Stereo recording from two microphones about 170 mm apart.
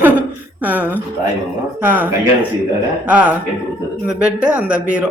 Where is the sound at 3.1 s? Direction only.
5° right (ahead or behind).